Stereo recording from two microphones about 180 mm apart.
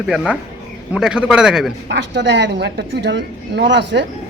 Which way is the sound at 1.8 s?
80° right.